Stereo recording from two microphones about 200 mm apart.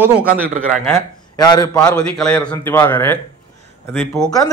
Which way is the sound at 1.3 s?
20° left (ahead or behind).